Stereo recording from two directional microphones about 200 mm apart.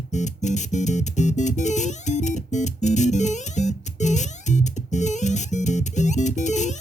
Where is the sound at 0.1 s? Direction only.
35° left (ahead or behind).